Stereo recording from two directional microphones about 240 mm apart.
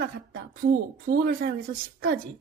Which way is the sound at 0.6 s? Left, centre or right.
Right.